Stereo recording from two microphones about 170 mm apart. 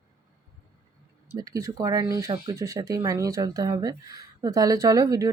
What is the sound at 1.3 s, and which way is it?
Speech, 20° right (ahead or behind).